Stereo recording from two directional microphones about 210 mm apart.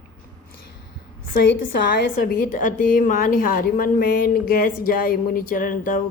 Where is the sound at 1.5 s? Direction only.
60° left (ahead or behind).